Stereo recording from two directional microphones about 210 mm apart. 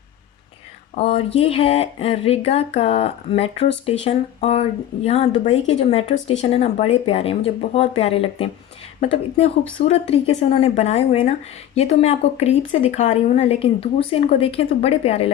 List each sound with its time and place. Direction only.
0.9 s speech: 30° left (ahead or behind)